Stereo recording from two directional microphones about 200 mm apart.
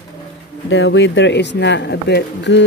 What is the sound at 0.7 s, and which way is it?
Speech, 70° left (ahead or behind).